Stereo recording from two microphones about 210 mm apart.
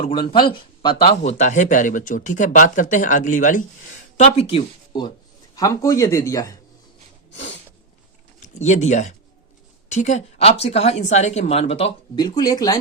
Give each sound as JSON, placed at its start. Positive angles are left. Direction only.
{"t": 0.0, "sound": "speech", "side_deg": 20}
{"t": 8.4, "sound": "speech", "side_deg": 35}